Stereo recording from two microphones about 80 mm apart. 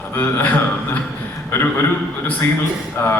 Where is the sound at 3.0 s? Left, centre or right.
Left.